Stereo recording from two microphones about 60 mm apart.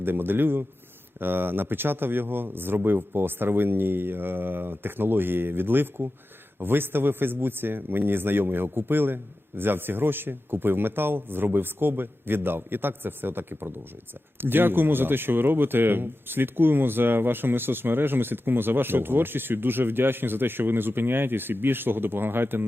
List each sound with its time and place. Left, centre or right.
0.0 s speech: right